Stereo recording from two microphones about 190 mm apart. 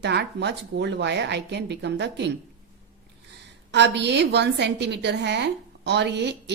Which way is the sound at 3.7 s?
65° right (ahead or behind).